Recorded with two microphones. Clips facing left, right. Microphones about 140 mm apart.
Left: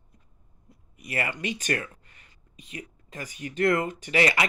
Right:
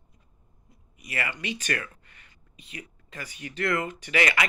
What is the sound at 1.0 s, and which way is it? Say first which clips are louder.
Speech: left 3 dB; 45° left (ahead or behind).